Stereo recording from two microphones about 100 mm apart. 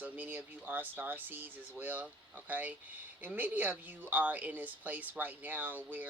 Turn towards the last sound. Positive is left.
turn(degrees=-15)  # may be behind; listen again after turning